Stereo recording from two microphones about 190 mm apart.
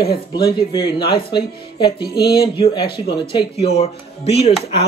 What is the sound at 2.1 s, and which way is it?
Speech, 55° left (ahead or behind).